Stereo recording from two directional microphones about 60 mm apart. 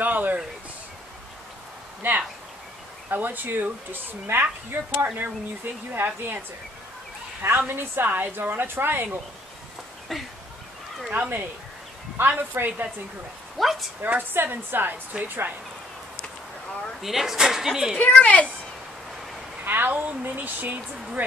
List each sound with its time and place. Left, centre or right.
0.0 s a sound: right
3.1 s a woman's voice: right
7.4 s a woman's voice: right
11.1 s a woman's voice: right
13.6 s speech: centre
14.0 s a woman's voice: right
17.0 s speech: centre
17.9 s speech: left
19.6 s speech: right